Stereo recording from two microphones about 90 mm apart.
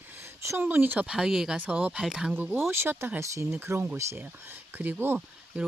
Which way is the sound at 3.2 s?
35° right (ahead or behind).